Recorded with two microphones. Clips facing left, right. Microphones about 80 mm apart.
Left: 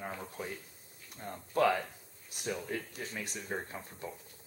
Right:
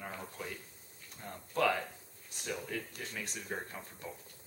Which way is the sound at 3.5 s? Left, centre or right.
Left.